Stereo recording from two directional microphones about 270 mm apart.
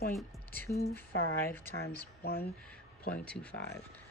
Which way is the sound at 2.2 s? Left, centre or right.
Left.